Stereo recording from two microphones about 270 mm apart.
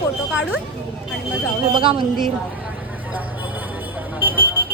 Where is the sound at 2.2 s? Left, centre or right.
Centre.